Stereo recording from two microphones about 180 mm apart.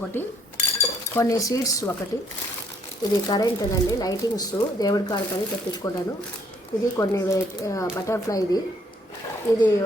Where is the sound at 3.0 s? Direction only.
20° left (ahead or behind).